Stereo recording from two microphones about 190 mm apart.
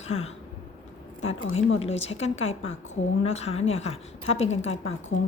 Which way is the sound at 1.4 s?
90° left.